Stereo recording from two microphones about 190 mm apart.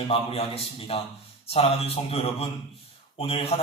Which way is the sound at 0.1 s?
30° left (ahead or behind).